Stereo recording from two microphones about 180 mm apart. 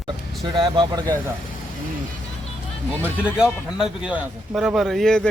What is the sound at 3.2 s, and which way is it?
Speech, 5° right (ahead or behind).